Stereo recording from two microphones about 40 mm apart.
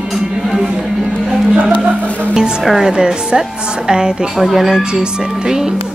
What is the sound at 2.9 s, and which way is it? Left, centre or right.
Speech, centre.